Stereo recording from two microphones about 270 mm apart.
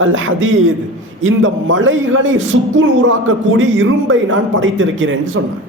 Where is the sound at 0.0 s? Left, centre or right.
Right.